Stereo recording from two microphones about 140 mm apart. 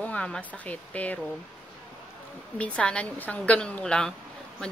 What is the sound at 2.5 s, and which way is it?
Speech, 10° left (ahead or behind).